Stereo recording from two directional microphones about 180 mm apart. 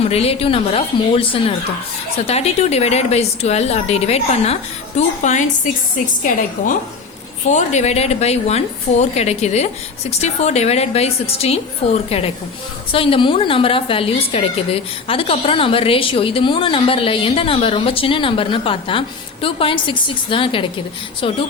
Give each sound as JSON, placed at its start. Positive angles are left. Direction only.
{"t": 0.0, "sound": "a woman's voice", "side_deg": 35}
{"t": 7.4, "sound": "a woman's voice", "side_deg": 40}